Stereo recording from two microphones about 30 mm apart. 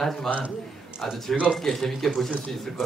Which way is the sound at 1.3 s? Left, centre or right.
Centre.